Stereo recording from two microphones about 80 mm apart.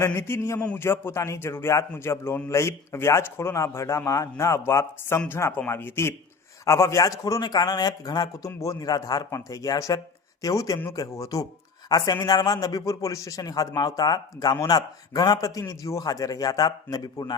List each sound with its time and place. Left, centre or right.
0.0 s a man's voice: left